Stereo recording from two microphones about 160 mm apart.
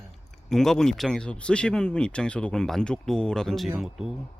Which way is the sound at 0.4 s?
Centre (ahead or behind).